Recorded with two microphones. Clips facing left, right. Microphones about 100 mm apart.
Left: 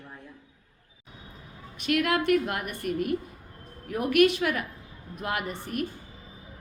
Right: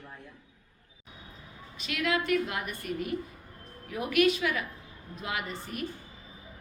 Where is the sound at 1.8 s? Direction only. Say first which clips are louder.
Left 5 dB; 55° left (ahead or behind).